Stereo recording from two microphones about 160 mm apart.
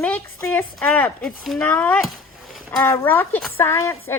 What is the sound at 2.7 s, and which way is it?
A woman's voice, 15° left (ahead or behind).